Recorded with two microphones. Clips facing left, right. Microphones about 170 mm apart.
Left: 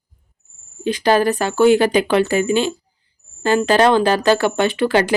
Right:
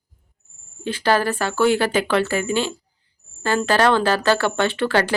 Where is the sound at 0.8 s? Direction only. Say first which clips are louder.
Left 4 dB; 15° left (ahead or behind).